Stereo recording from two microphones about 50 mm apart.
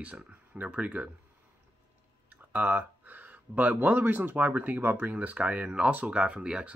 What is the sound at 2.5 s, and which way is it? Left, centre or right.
Speech, right.